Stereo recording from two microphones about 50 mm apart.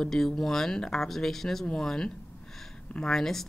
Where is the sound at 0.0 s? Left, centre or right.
Centre.